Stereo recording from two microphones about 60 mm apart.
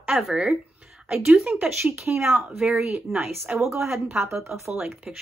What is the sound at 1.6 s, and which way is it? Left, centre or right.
Speech, right.